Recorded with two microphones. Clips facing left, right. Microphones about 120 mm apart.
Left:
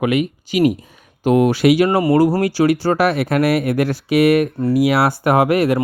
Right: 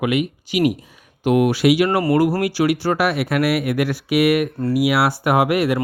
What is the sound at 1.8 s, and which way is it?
Speech, 30° left (ahead or behind).